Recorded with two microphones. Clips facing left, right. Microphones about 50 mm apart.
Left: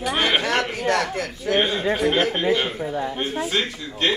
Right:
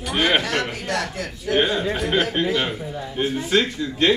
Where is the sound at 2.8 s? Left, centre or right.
Left.